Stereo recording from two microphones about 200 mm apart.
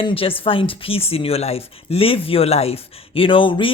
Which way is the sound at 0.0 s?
25° left (ahead or behind).